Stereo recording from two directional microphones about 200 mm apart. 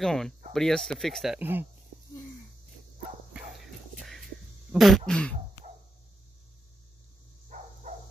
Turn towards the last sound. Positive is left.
turn(degrees=-35)  # may be behind; listen again after turning